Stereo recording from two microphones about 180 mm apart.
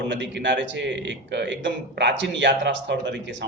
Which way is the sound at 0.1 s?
85° right.